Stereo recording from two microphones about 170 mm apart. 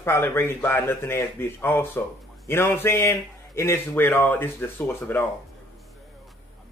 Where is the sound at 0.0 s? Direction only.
15° left (ahead or behind).